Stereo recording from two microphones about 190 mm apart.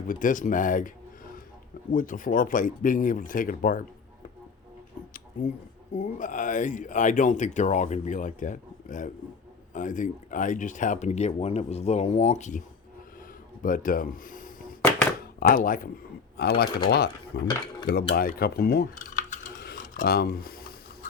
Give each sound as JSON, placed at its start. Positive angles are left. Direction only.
{"t": 0.1, "sound": "speech", "side_deg": 45}
{"t": 5.9, "sound": "speech", "side_deg": 40}
{"t": 19.6, "sound": "a sound", "side_deg": 45}